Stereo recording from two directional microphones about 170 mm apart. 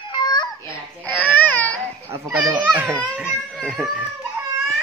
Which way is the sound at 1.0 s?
10° left (ahead or behind).